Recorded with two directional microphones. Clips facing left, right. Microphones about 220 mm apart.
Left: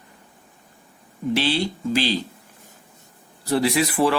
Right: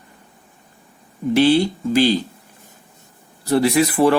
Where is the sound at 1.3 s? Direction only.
50° right (ahead or behind).